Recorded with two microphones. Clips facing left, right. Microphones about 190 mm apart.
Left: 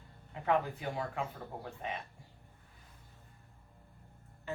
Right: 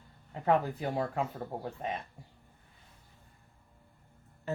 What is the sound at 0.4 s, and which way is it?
Speech, 40° right (ahead or behind).